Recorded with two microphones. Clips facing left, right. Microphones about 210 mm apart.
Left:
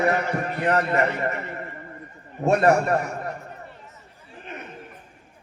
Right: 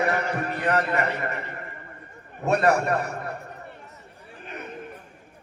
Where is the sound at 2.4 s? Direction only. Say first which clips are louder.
Left 3 dB; 30° left (ahead or behind).